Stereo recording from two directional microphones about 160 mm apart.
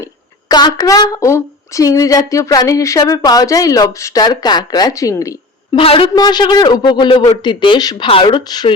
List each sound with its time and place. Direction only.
0.0 s a woman's voice: 25° left (ahead or behind)
5.7 s a woman's voice: 35° left (ahead or behind)